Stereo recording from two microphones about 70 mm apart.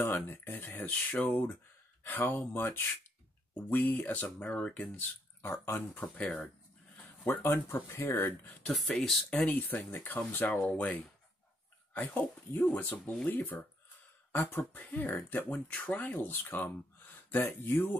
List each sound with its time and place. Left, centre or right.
0.0 s speech: left
0.7 s speech: centre
5.5 s speech: left
7.0 s a sound: left
7.9 s speech: left
8.6 s speech: centre
9.3 s speech: left